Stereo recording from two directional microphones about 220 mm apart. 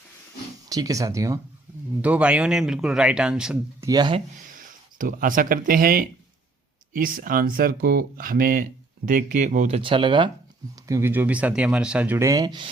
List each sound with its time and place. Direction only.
0.7 s a man's voice: 15° right (ahead or behind)
3.8 s speech: 20° right (ahead or behind)
4.4 s speech: 40° right (ahead or behind)
9.8 s speech: 20° right (ahead or behind)